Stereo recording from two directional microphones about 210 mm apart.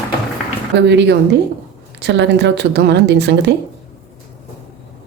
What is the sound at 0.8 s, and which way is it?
A woman's voice, 55° right (ahead or behind).